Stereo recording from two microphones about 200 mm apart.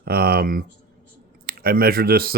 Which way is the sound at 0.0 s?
50° right (ahead or behind).